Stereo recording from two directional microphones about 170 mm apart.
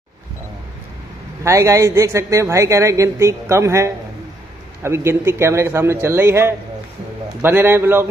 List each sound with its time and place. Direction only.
1.4 s speech: 15° right (ahead or behind)